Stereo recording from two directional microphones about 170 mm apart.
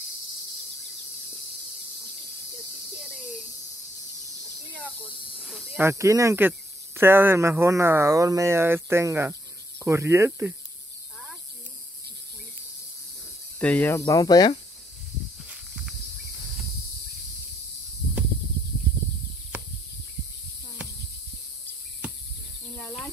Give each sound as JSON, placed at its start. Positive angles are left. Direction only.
{"t": 5.4, "sound": "speech", "side_deg": -5}
{"t": 5.8, "sound": "speech", "side_deg": -15}
{"t": 13.6, "sound": "speech", "side_deg": 10}
{"t": 15.4, "sound": "snake", "side_deg": -5}